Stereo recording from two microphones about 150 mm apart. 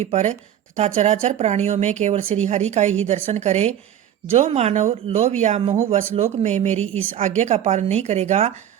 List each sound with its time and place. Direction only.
0.0 s speech: 45° right (ahead or behind)